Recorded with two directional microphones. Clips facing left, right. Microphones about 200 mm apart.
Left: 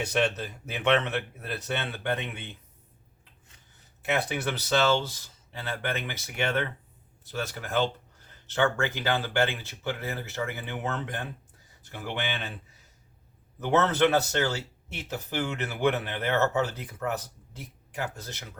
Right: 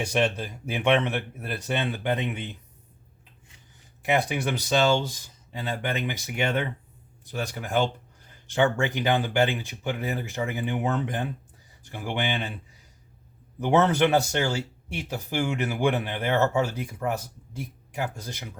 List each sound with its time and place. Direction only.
0.1 s speech: 15° right (ahead or behind)
4.0 s speech: 15° right (ahead or behind)
13.6 s speech: 15° right (ahead or behind)